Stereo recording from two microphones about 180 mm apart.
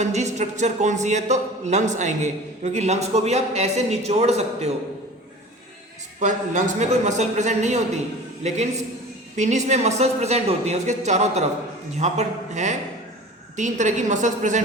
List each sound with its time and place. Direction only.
0.0 s speech: 40° right (ahead or behind)
6.1 s a woman's voice: 45° right (ahead or behind)